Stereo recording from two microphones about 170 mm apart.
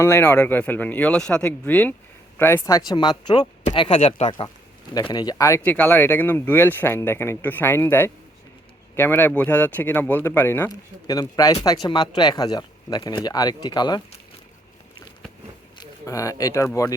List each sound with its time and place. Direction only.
0.0 s speech: 15° left (ahead or behind)
15.8 s speech: 20° left (ahead or behind)